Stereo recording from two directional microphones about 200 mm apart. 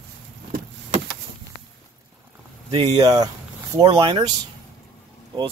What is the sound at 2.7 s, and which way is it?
Speech, 25° right (ahead or behind).